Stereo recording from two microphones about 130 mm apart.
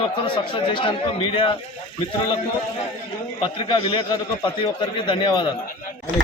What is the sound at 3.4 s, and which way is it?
A man's voice, 40° left (ahead or behind).